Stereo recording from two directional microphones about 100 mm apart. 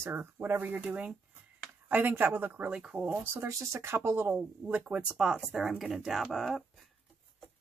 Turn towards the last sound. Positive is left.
turn(degrees=0)  # may be behind; listen again after turning